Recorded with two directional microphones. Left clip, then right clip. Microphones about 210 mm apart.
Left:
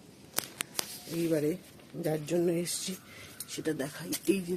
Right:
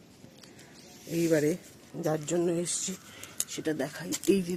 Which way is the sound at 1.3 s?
25° right (ahead or behind).